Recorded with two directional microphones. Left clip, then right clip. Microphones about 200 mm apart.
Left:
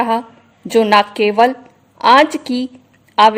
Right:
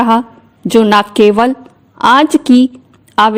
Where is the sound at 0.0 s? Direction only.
35° right (ahead or behind).